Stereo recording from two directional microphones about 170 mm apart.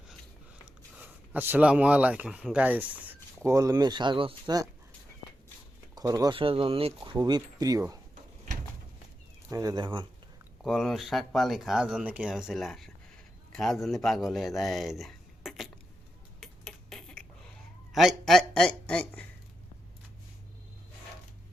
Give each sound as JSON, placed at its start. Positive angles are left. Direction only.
{"t": 0.6, "sound": "speech", "side_deg": -10}
{"t": 5.9, "sound": "speech", "side_deg": -20}
{"t": 9.5, "sound": "speech", "side_deg": -20}
{"t": 10.6, "sound": "speech", "side_deg": 0}
{"t": 16.4, "sound": "a sound", "side_deg": 5}